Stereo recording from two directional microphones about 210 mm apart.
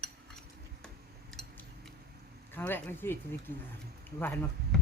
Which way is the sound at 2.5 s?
10° left (ahead or behind).